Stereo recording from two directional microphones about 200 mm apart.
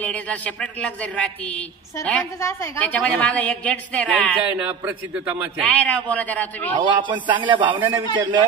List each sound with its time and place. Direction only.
0.0 s speech: 5° left (ahead or behind)
4.5 s a man's voice: 10° right (ahead or behind)
5.8 s speech: 5° left (ahead or behind)
6.8 s speech: 25° right (ahead or behind)